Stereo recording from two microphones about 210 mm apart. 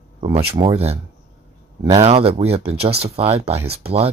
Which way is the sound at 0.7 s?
30° right (ahead or behind).